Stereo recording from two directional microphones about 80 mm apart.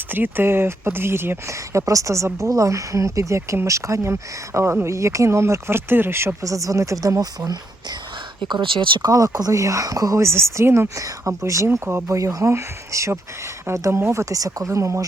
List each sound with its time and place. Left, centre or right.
0.1 s speech: right
8.4 s speech: right
9.0 s speech: right